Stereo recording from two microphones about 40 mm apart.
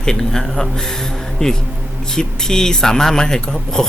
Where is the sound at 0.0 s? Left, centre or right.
Centre.